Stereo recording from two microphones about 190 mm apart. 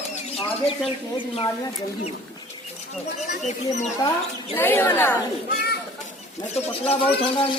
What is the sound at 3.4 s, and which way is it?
Speech, 35° left (ahead or behind).